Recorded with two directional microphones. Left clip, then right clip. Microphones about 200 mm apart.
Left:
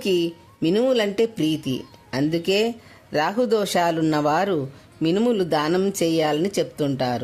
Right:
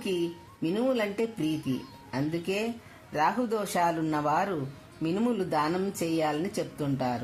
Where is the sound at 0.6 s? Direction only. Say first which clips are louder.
Left 8 dB; 50° left (ahead or behind).